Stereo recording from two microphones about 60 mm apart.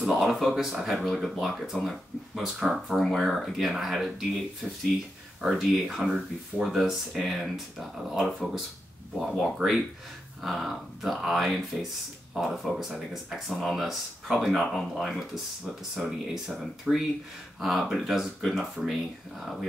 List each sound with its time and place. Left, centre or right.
0.0 s speech: centre
5.4 s speech: centre
9.6 s speech: right
10.4 s speech: centre
14.7 s speech: centre